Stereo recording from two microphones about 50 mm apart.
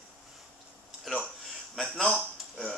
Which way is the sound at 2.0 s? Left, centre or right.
Centre.